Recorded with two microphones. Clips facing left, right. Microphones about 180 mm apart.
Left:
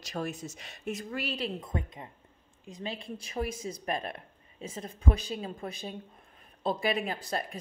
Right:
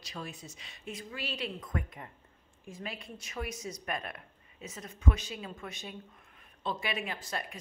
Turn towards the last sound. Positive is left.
turn(degrees=35)  # may be behind; listen again after turning